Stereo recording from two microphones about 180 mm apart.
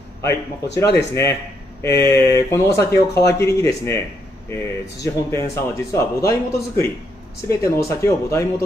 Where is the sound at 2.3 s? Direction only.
15° left (ahead or behind).